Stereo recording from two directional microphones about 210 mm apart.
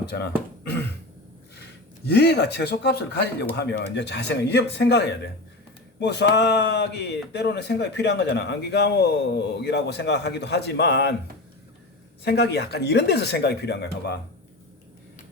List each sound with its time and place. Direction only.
0.0 s a man's voice: 50° left (ahead or behind)
2.0 s a man's voice: 50° left (ahead or behind)
12.2 s a man's voice: 55° left (ahead or behind)